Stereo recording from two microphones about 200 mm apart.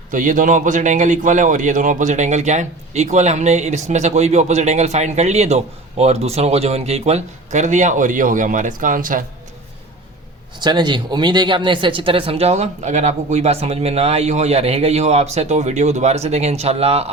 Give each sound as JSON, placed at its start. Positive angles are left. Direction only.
{"t": 0.1, "sound": "a man's voice", "side_deg": -40}
{"t": 10.6, "sound": "a man's voice", "side_deg": -20}